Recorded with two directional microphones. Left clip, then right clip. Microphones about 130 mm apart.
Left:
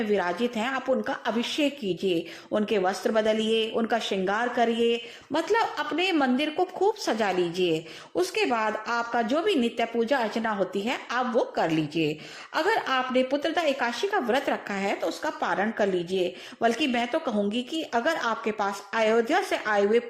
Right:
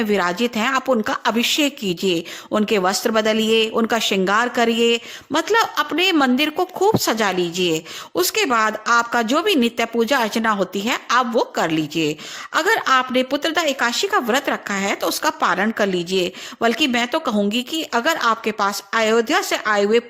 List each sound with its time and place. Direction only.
0.0 s a woman's voice: 40° right (ahead or behind)
15.0 s a woman's voice: 40° right (ahead or behind)